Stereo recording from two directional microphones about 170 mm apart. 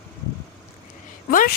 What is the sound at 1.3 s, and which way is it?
Speech, 55° left (ahead or behind).